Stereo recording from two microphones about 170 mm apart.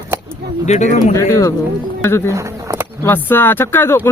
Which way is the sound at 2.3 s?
15° right (ahead or behind).